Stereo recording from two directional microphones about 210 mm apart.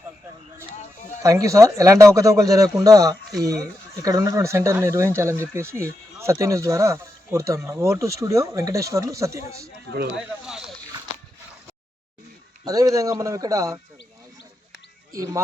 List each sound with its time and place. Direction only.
1.2 s speech: 15° right (ahead or behind)
10.4 s speech: 5° right (ahead or behind)
12.6 s speech: 15° right (ahead or behind)